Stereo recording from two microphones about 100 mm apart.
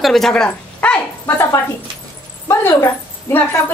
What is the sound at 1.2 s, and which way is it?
A woman's voice, 25° left (ahead or behind).